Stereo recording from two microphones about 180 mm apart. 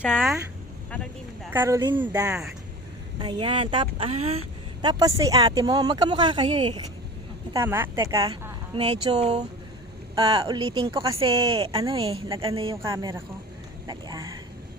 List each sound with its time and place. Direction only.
0.0 s speech: 5° left (ahead or behind)
1.5 s a woman's voice: 15° right (ahead or behind)
3.2 s speech: 25° right (ahead or behind)
7.5 s a woman's voice: 15° right (ahead or behind)
8.7 s speech: 30° right (ahead or behind)
10.2 s speech: 20° right (ahead or behind)
12.7 s a woman's voice: 15° right (ahead or behind)